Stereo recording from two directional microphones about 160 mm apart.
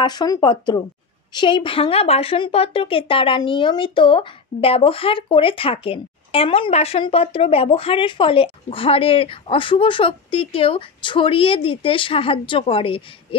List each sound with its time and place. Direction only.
0.0 s a woman's voice: 25° left (ahead or behind)